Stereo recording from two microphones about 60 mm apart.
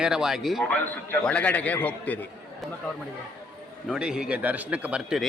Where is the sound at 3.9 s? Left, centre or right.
Centre.